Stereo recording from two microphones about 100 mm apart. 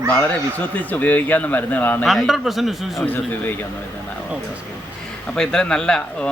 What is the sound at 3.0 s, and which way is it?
Speech, 20° left (ahead or behind).